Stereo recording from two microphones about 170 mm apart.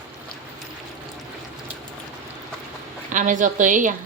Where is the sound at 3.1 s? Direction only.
50° right (ahead or behind).